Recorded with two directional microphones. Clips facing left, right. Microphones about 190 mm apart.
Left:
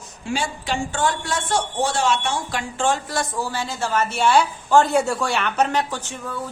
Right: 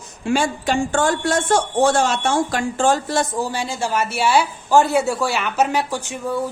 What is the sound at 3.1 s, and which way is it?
A woman's voice, 20° right (ahead or behind).